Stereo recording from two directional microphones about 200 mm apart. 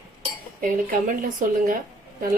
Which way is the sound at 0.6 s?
40° right (ahead or behind).